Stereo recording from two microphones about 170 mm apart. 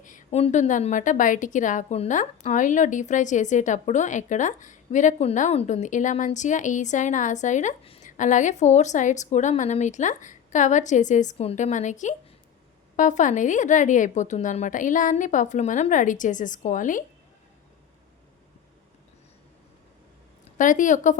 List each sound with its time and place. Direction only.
0.0 s a woman's voice: 50° left (ahead or behind)
20.6 s a woman's voice: 50° left (ahead or behind)